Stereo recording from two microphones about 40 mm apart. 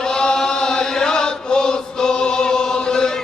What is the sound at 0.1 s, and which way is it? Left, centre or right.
Chant, centre.